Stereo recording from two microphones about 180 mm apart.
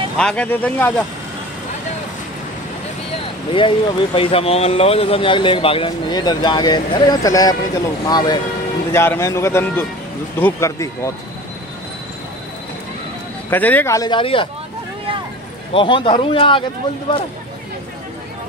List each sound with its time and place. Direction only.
0.2 s a man's voice: 5° left (ahead or behind)
3.5 s a man's voice: 30° left (ahead or behind)
13.5 s speech: 10° left (ahead or behind); by 14.5 s 30° left (ahead or behind)
15.7 s speech: 30° left (ahead or behind)